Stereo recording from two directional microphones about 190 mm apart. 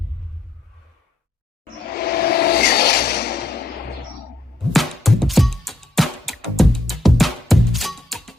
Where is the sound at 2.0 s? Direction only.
55° left (ahead or behind).